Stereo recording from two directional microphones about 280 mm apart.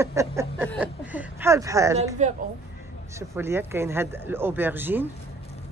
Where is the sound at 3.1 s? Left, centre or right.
Centre.